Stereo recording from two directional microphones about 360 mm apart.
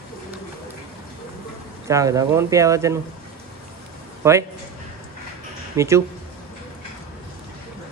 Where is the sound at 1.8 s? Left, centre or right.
Centre.